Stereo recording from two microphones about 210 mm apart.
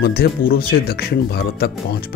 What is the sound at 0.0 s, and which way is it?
Speech, 45° left (ahead or behind).